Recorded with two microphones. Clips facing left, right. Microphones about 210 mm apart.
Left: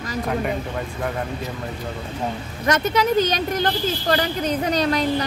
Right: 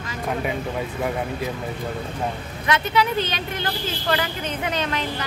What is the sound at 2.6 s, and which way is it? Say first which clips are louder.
A woman's voice: left 2 dB; 45° left (ahead or behind).